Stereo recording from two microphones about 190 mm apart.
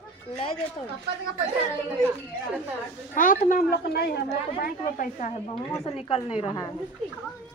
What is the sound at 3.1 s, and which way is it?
A man's voice, 45° left (ahead or behind).